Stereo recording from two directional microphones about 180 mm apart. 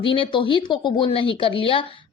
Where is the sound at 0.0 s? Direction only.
30° left (ahead or behind).